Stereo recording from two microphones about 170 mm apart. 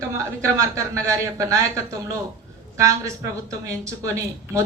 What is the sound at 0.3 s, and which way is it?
A woman's voice, 15° right (ahead or behind).